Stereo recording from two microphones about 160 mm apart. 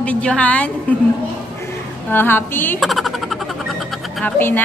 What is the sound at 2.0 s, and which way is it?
Speech, 15° left (ahead or behind).